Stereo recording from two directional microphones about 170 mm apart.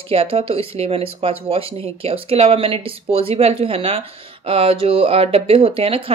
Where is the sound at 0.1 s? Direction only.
35° right (ahead or behind).